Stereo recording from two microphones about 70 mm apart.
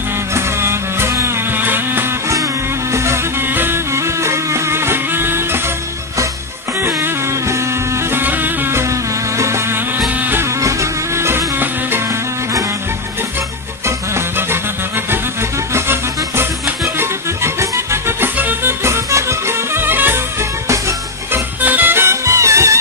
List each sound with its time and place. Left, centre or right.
0.3 s music: right
1.6 s vehicle: right
2.9 s music: right
6.8 s music: right
8.1 s music: right
9.4 s vehicle: right
10.6 s music: right
13.8 s music: right
15.7 s music: right
21.3 s music: right